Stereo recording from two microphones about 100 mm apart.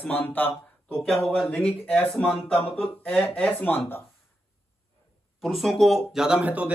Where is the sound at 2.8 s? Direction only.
15° left (ahead or behind).